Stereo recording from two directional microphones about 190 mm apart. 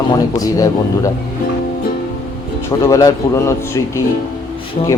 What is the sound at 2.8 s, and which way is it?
Speech, 15° left (ahead or behind).